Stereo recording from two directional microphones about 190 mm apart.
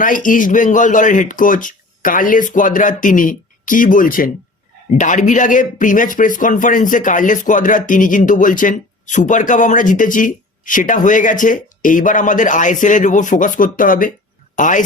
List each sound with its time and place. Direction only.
0.0 s a man's voice: 45° left (ahead or behind)